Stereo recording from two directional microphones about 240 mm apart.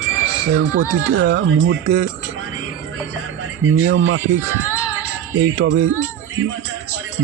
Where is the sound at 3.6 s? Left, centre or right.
Right.